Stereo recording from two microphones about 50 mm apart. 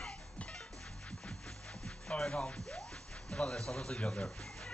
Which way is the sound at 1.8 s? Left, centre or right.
Centre.